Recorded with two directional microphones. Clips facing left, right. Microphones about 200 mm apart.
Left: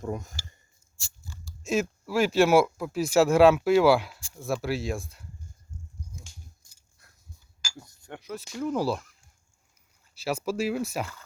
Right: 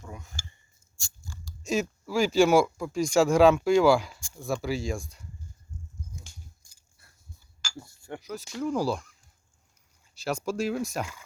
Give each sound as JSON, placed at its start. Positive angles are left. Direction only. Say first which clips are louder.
{"t": 0.0, "sound": "speech", "louder": "left 10 dB", "side_deg": 45}
{"t": 1.6, "sound": "speech", "louder": "left 1 dB", "side_deg": 0}
{"t": 7.8, "sound": "speech", "louder": "right 4 dB", "side_deg": -5}
{"t": 10.2, "sound": "speech", "louder": "left 1 dB", "side_deg": 5}